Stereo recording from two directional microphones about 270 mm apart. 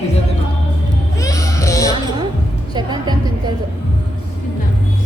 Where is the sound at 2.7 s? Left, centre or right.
Centre.